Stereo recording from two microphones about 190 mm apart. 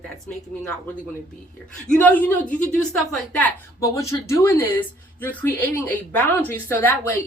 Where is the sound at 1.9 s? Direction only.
10° left (ahead or behind).